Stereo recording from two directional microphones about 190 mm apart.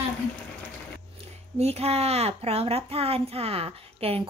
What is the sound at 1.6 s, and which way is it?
A child's voice, 35° right (ahead or behind).